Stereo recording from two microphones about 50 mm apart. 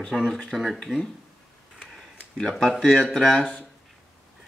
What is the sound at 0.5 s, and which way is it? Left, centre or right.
Speech, centre.